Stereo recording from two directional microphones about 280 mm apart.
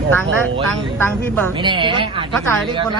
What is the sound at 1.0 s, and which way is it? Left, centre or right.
Speech, centre.